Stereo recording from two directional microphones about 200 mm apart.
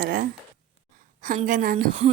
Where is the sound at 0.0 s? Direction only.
45° right (ahead or behind).